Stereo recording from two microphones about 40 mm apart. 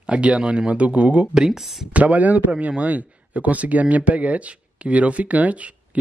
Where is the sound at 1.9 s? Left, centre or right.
Right.